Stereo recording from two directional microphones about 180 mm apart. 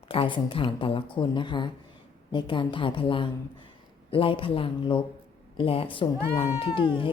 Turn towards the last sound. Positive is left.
turn(degrees=30)  # may be behind; listen again after turning